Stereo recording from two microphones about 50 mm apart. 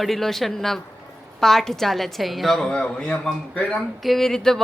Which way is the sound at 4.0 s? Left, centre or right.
Centre.